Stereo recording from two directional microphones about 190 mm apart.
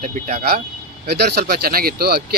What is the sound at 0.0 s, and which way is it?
A man's voice, 45° right (ahead or behind).